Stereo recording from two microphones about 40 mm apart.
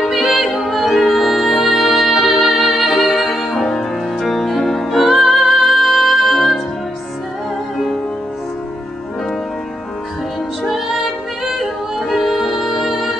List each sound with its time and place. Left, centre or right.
0.0 s music: centre
12.1 s music: centre